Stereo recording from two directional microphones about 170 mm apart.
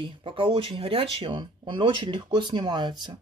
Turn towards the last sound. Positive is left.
turn(degrees=-25)  # may be behind; listen again after turning